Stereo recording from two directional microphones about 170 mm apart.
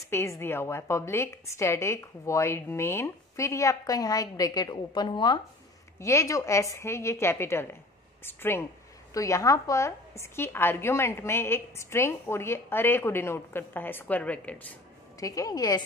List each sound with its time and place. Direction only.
0.1 s a woman's voice: 15° left (ahead or behind)
5.9 s a woman's voice: 15° left (ahead or behind)
15.1 s a woman's voice: 20° left (ahead or behind)